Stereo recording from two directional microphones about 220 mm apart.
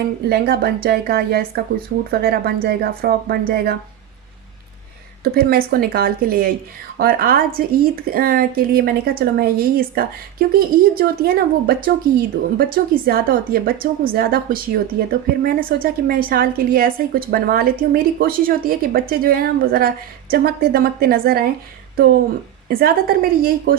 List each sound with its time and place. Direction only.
0.3 s speech: 45° right (ahead or behind)
5.2 s a woman's voice: 45° right (ahead or behind)
22.7 s a woman's voice: 40° right (ahead or behind)